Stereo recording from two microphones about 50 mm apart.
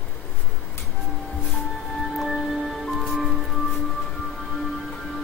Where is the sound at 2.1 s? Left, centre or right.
Centre.